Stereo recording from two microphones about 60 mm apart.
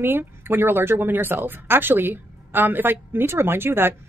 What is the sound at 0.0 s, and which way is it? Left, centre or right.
Speech, right.